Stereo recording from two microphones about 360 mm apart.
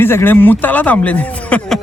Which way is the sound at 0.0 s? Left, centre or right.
Centre.